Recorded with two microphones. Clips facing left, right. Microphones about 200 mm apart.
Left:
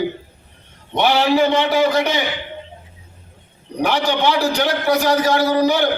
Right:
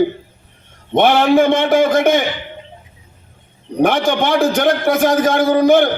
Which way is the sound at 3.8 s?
50° right (ahead or behind).